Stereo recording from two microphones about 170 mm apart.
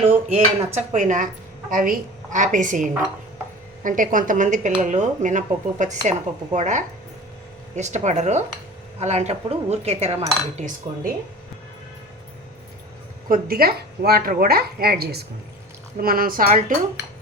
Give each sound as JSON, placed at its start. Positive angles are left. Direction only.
{"t": 0.0, "sound": "a woman's voice", "side_deg": -40}
{"t": 13.2, "sound": "speech", "side_deg": -55}